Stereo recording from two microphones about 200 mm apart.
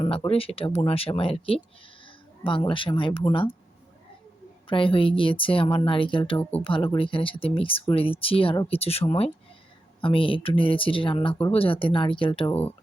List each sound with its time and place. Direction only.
0.3 s speech: 30° left (ahead or behind)
4.7 s speech: 25° left (ahead or behind)
12.5 s speech: 10° left (ahead or behind)